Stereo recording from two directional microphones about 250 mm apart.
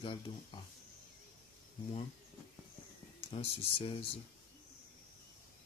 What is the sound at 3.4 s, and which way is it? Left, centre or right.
Speech, left.